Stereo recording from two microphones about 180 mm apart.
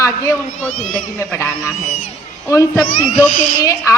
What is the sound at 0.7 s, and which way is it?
Speech, 45° left (ahead or behind).